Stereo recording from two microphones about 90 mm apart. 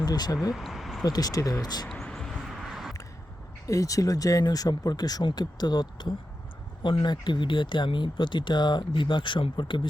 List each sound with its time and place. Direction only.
0.0 s speech: 45° left (ahead or behind)
0.5 s a sound: centre (ahead or behind)
1.0 s speech: 45° left (ahead or behind)
1.6 s speech: 50° left (ahead or behind)
1.9 s vehicle: 5° left (ahead or behind)
2.5 s a sound: 5° right (ahead or behind)
3.7 s speech: 40° left (ahead or behind); by 9.8 s 65° left (ahead or behind)